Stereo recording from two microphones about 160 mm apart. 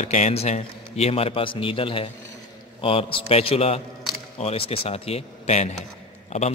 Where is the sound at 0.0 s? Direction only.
45° left (ahead or behind).